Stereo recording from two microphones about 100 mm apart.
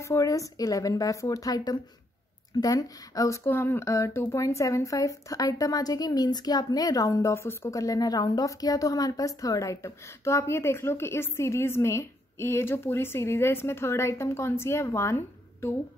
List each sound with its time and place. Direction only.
0.0 s a woman's voice: 30° left (ahead or behind)
3.4 s speech: 25° left (ahead or behind)